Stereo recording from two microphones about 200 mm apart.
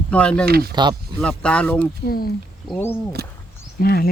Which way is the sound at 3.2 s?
50° right (ahead or behind).